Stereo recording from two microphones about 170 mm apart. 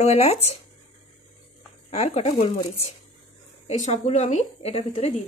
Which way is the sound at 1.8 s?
40° left (ahead or behind).